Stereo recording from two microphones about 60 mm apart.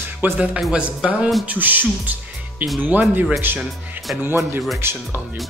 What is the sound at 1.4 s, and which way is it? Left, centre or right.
Music, right.